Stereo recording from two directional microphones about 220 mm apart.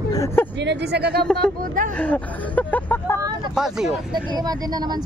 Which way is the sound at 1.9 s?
5° left (ahead or behind).